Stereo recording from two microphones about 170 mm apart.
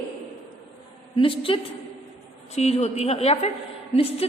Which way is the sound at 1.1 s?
30° left (ahead or behind).